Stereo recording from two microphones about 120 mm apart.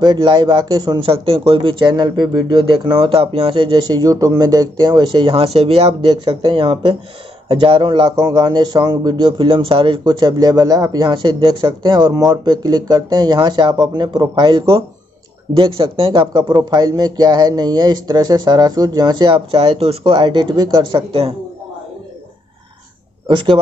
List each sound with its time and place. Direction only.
0.0 s speech: 40° right (ahead or behind); by 5.9 s 55° right (ahead or behind)
5.9 s speech: 45° right (ahead or behind)
23.2 s a man's voice: 45° right (ahead or behind)